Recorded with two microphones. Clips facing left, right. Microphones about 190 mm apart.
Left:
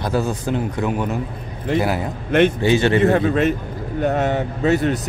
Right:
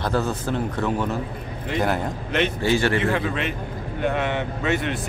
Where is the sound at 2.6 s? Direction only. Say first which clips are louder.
Left 4 dB; 20° left (ahead or behind).